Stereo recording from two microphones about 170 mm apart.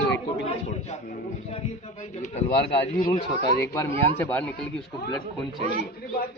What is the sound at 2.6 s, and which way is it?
Speech, 90° left.